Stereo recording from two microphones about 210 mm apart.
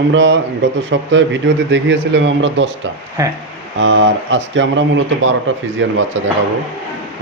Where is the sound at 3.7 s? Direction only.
65° right (ahead or behind).